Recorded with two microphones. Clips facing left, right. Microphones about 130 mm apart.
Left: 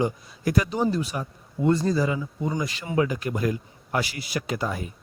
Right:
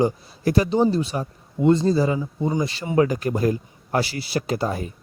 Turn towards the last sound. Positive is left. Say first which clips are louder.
# right 4 dB
turn(degrees=-35)  # may be behind; listen again after turning